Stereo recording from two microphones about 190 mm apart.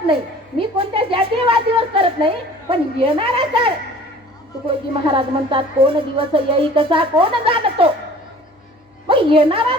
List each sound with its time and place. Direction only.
0.6 s a sound: 30° right (ahead or behind)
4.6 s speech: 25° right (ahead or behind)
9.0 s a woman's voice: 30° right (ahead or behind)